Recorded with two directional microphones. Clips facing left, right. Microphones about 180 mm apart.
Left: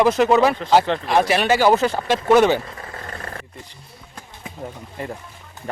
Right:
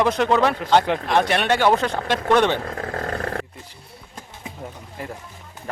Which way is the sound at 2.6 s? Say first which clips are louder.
Right 8 dB; 70° right (ahead or behind).